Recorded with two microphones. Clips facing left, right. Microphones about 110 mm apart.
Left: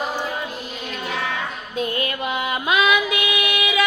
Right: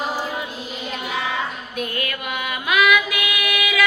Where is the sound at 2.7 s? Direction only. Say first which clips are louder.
Right 1 dB; 25° left (ahead or behind).